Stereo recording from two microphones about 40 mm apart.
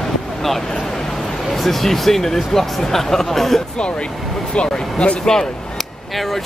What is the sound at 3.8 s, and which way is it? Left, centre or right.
Speech, left.